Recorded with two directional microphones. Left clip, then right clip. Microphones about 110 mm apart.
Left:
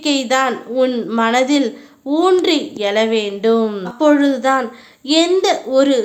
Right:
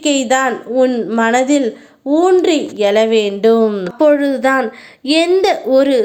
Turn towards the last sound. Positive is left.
turn(degrees=-35)  # may be behind; listen again after turning